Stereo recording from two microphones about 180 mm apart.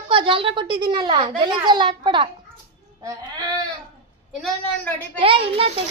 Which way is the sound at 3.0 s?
20° right (ahead or behind).